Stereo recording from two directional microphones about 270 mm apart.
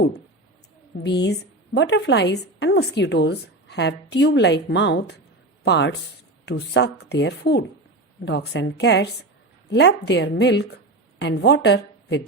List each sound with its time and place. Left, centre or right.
0.9 s a woman's voice: left